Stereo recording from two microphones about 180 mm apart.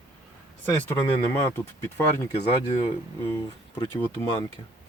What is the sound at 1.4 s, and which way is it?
Speech, 15° left (ahead or behind).